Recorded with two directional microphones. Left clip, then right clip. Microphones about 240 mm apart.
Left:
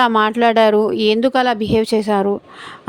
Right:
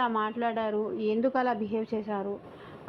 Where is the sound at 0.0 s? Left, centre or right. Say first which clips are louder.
Left 15 dB; left.